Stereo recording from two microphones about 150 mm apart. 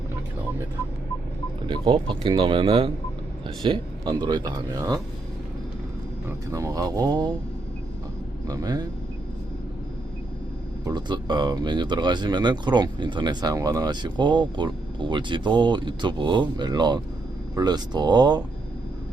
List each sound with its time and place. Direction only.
1.6 s speech: 35° right (ahead or behind)
6.2 s speech: 20° right (ahead or behind)
8.4 s speech: 25° right (ahead or behind)
10.8 s speech: 30° right (ahead or behind)